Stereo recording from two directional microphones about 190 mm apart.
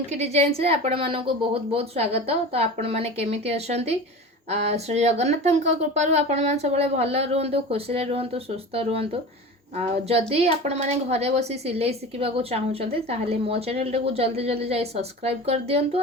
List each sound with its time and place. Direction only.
0.1 s speech: 35° right (ahead or behind)